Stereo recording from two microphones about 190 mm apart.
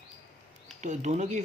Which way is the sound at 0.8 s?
40° right (ahead or behind).